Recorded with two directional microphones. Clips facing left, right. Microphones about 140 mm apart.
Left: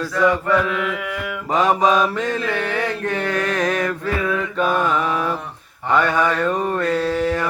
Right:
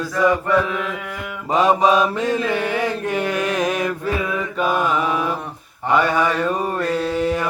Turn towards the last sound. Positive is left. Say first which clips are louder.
# even
turn(degrees=-10)  # may be behind; listen again after turning